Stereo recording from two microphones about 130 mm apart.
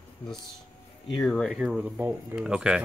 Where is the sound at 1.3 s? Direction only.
5° left (ahead or behind).